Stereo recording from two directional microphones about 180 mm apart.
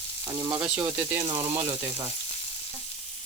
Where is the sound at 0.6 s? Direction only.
5° right (ahead or behind).